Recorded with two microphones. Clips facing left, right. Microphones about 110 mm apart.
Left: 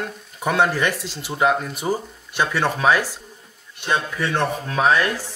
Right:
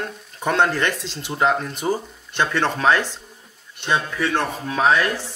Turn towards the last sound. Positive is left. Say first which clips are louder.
# even
turn(degrees=0)  # may be behind; listen again after turning